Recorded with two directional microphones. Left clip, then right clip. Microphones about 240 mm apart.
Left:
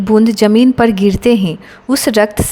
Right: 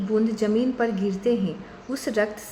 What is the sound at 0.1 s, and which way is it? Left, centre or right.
A woman's voice, left.